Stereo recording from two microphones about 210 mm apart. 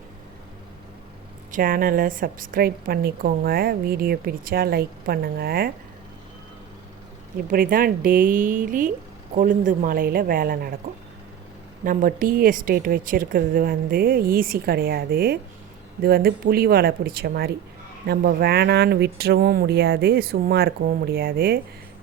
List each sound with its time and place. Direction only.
1.5 s a woman's voice: 40° right (ahead or behind)
7.5 s a woman's voice: 45° right (ahead or behind)
11.9 s a woman's voice: 40° right (ahead or behind)